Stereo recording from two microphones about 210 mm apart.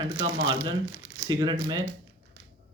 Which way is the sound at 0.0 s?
20° right (ahead or behind).